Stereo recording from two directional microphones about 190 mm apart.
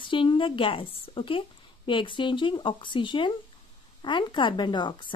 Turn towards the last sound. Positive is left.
turn(degrees=25)  # may be behind; listen again after turning